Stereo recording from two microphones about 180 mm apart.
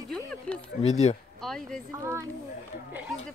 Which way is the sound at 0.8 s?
40° left (ahead or behind).